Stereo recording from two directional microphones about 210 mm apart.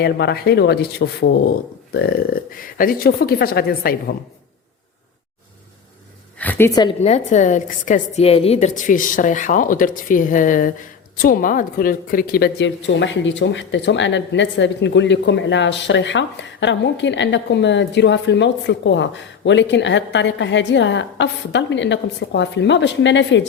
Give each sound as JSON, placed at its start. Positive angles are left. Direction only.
{"t": 0.0, "sound": "speech", "side_deg": 50}
{"t": 6.4, "sound": "a woman's voice", "side_deg": 10}
{"t": 7.0, "sound": "a woman's voice", "side_deg": 35}